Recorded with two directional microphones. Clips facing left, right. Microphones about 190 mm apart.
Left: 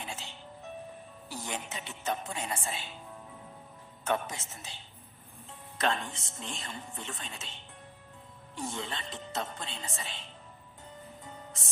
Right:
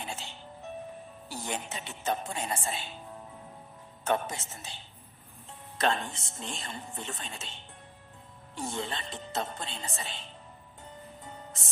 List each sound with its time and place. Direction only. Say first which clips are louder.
0.0 s music: right 2 dB; 30° right (ahead or behind)
1.3 s music: right 2 dB; 30° right (ahead or behind)
4.0 s speech: right 2 dB; 30° right (ahead or behind)
5.7 s speech: right 2 dB; 30° right (ahead or behind)
8.5 s speech: right 2 dB; 35° right (ahead or behind)